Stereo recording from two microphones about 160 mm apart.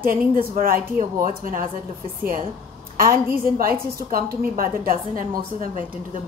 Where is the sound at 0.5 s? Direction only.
65° right (ahead or behind).